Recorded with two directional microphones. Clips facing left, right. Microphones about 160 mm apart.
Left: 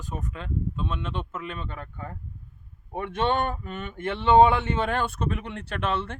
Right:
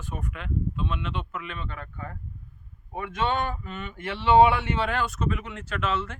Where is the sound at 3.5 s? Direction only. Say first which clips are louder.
Left 2 dB; 40° left (ahead or behind).